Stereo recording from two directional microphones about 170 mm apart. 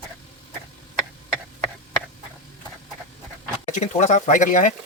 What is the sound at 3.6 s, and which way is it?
Speech, 45° left (ahead or behind).